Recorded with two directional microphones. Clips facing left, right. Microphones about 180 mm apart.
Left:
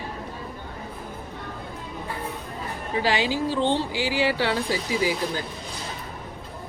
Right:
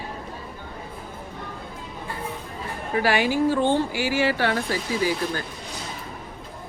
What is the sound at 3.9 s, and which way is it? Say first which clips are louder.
Speech: right 1 dB; 15° left (ahead or behind).